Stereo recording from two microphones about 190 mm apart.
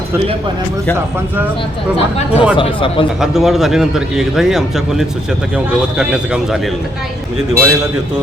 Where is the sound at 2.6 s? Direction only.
25° left (ahead or behind).